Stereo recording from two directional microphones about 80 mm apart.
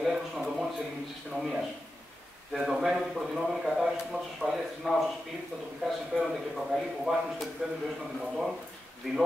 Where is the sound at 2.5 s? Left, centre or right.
Centre.